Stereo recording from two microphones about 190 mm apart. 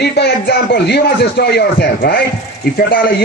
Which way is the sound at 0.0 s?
60° left (ahead or behind).